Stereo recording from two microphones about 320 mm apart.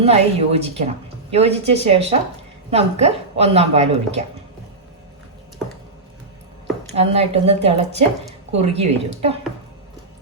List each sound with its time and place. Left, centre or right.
0.0 s a woman's voice: centre
6.9 s a woman's voice: centre